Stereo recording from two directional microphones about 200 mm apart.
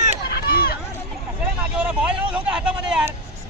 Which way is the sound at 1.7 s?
5° right (ahead or behind).